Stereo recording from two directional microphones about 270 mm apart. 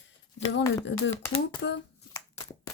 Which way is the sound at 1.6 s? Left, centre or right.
Left.